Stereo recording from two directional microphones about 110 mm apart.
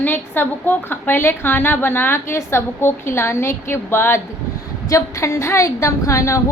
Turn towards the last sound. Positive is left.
turn(degrees=25)  # may be behind; listen again after turning